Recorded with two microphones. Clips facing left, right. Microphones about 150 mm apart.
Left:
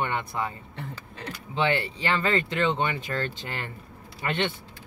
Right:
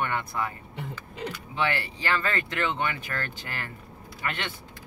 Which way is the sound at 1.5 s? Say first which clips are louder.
Left 4 dB; 20° left (ahead or behind).